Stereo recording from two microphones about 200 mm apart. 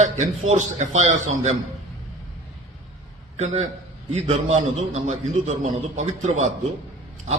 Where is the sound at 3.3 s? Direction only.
35° right (ahead or behind).